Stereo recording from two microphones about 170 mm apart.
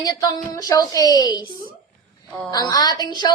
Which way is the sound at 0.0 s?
25° left (ahead or behind).